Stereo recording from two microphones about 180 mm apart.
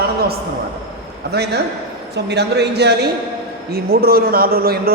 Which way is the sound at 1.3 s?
65° right (ahead or behind).